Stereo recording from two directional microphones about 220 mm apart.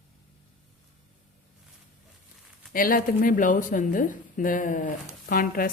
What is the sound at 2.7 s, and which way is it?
A woman's voice, 40° left (ahead or behind).